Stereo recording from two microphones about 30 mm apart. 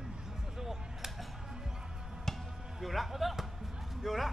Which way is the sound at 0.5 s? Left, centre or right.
Centre.